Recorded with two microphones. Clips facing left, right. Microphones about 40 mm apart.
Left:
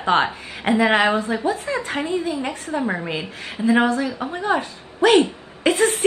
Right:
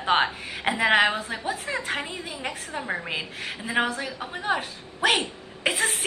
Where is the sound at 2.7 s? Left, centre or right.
Left.